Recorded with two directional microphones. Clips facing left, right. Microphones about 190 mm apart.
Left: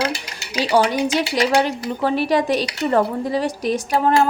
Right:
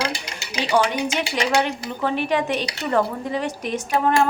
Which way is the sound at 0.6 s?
35° left (ahead or behind).